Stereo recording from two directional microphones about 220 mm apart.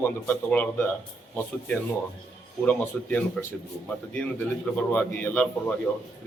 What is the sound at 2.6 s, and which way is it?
Speech, 5° left (ahead or behind).